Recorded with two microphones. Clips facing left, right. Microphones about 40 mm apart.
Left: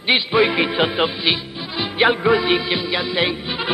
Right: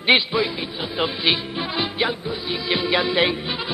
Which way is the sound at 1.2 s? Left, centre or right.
Centre.